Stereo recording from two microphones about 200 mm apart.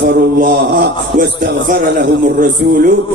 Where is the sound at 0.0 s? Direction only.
50° right (ahead or behind).